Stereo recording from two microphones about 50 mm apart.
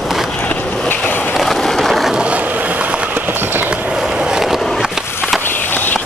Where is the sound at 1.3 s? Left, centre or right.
Centre.